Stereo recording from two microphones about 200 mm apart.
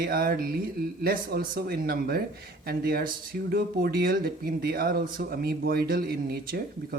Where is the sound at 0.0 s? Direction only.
50° right (ahead or behind).